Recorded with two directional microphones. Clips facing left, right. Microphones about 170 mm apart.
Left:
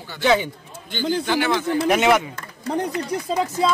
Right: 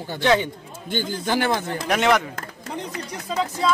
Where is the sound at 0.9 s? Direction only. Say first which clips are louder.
Left 2 dB; 50° right (ahead or behind).